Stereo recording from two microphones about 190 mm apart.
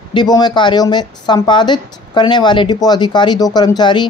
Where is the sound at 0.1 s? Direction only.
25° left (ahead or behind).